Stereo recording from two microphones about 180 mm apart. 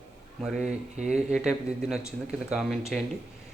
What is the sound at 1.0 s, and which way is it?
Speech, 40° right (ahead or behind).